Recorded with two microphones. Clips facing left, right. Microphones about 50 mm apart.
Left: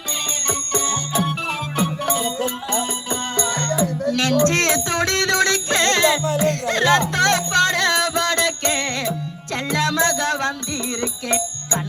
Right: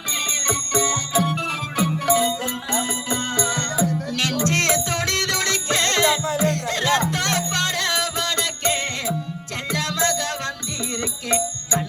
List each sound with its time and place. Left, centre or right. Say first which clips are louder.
0.4 s jingle bell: right 1 dB; right
1.2 s music: even; left
1.7 s music: right 3 dB; left
9.6 s music: left 4 dB; left